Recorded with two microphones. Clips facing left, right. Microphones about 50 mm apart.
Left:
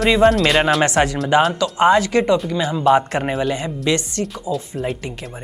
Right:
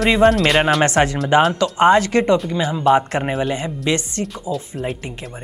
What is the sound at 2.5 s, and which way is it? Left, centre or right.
Speech, centre.